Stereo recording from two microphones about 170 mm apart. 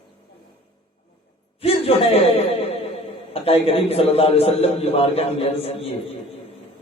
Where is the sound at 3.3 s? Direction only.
35° left (ahead or behind).